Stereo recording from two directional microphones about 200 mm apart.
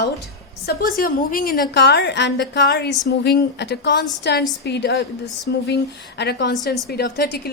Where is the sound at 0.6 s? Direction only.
50° left (ahead or behind).